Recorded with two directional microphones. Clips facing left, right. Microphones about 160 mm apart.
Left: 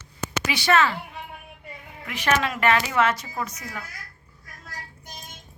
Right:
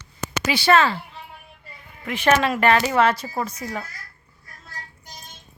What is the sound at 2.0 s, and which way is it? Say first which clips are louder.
Speech: right 5 dB; 30° right (ahead or behind).